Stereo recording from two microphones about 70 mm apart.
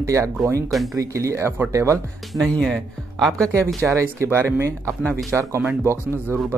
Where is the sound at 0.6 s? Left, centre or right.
Centre.